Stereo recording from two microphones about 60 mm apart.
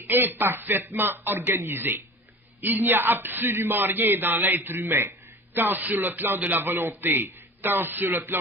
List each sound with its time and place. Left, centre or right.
0.0 s speech: right